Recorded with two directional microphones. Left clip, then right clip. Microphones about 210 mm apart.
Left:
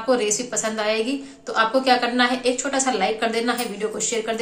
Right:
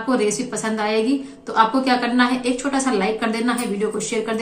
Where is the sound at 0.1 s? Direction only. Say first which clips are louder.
Even; 5° left (ahead or behind).